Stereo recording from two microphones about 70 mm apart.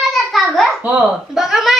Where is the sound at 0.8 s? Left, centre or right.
Right.